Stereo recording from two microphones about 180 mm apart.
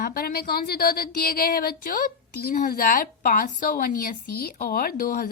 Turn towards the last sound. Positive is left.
turn(degrees=55)  # may be behind; listen again after turning